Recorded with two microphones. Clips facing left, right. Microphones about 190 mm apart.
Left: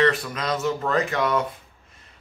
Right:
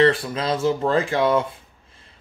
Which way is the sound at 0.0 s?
30° right (ahead or behind).